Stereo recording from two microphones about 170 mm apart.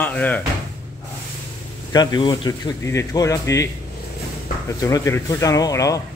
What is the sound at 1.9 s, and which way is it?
Speech, 25° left (ahead or behind).